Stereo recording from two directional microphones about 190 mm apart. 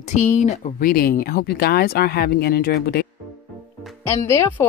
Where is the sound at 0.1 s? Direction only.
40° left (ahead or behind); by 3.1 s 55° left (ahead or behind).